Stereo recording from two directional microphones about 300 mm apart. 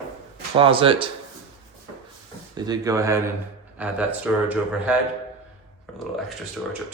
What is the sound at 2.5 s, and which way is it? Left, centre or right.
Speech, centre.